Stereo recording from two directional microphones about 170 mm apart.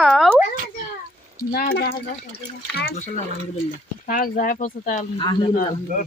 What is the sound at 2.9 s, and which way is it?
Speech, 45° left (ahead or behind).